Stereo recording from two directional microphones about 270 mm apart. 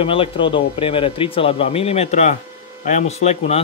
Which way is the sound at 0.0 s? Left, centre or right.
Centre.